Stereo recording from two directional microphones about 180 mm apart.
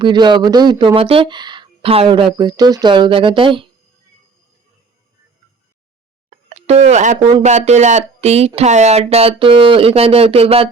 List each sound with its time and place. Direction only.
0.0 s speech: 25° right (ahead or behind)
6.3 s speech: 40° right (ahead or behind)